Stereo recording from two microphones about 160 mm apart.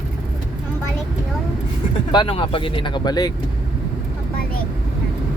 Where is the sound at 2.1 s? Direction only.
30° left (ahead or behind).